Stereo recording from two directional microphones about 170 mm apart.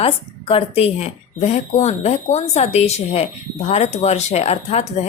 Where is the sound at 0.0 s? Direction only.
35° left (ahead or behind).